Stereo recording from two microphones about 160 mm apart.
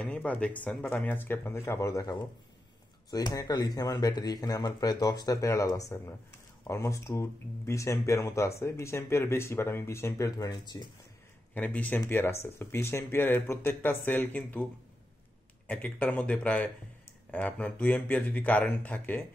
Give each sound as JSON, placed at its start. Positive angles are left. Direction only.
{"t": 0.0, "sound": "speech", "side_deg": 10}
{"t": 11.5, "sound": "speech", "side_deg": 10}